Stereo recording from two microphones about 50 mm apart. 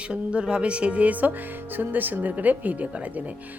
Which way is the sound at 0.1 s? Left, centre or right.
Right.